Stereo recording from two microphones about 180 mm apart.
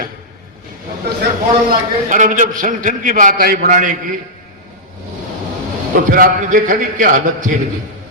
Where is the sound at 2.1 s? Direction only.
45° right (ahead or behind).